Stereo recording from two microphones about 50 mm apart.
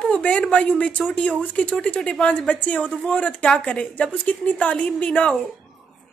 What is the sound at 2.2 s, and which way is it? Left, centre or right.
Speech, left.